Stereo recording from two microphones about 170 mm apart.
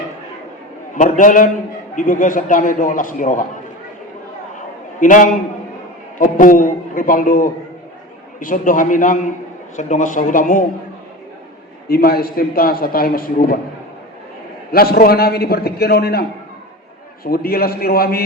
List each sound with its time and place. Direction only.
1.0 s a man's voice: 50° left (ahead or behind)
4.5 s a sound: 50° left (ahead or behind)
6.1 s a man's voice: 50° left (ahead or behind)
11.9 s a man's voice: 65° left (ahead or behind)
14.7 s a man's voice: 65° left (ahead or behind)
17.2 s a man's voice: 60° left (ahead or behind)